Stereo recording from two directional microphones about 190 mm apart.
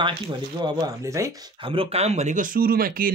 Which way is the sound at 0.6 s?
20° right (ahead or behind).